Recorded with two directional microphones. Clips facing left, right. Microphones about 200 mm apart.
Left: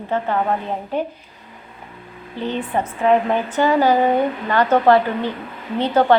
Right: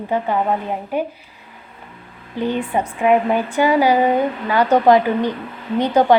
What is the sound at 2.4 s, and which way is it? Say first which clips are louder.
A woman's voice: right 2 dB; 10° right (ahead or behind).